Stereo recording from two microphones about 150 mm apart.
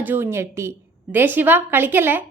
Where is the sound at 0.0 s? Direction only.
15° right (ahead or behind).